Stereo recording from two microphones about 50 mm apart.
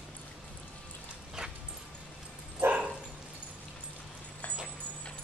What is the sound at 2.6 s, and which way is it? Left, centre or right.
Dog, right.